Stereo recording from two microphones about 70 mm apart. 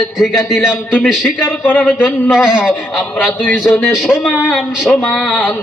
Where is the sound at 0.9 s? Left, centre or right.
Centre.